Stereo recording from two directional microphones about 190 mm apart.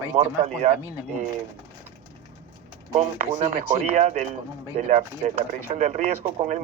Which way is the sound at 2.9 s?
40° right (ahead or behind).